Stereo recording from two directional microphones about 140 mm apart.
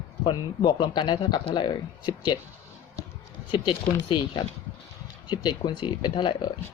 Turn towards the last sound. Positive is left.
turn(degrees=35)  # may be behind; listen again after turning